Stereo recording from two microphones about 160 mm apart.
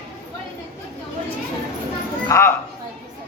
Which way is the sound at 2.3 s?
15° left (ahead or behind).